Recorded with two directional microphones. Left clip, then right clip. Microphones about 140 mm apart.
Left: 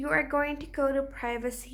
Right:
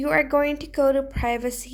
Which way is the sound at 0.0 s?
30° right (ahead or behind).